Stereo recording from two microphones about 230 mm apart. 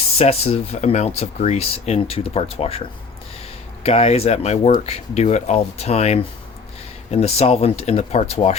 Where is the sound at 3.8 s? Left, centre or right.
Left.